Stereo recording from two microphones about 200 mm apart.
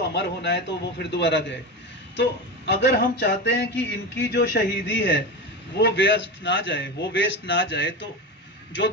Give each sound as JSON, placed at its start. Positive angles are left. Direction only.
{"t": 0.0, "sound": "a man's voice", "side_deg": 60}